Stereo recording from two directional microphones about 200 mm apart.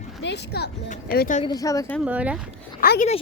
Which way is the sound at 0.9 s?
45° left (ahead or behind).